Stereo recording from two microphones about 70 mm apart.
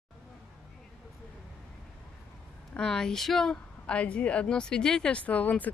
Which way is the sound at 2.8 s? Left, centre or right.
Centre.